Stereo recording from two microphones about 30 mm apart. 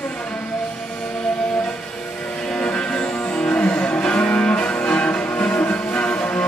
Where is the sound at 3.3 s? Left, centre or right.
Left.